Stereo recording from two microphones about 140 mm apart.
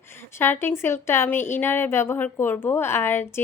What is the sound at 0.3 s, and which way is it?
A woman's voice, 15° left (ahead or behind).